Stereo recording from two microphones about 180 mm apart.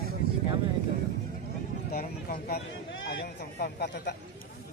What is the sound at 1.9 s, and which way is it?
Speech, 55° left (ahead or behind).